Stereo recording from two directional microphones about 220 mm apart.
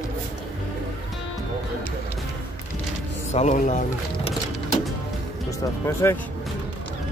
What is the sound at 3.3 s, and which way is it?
Speech, 30° left (ahead or behind).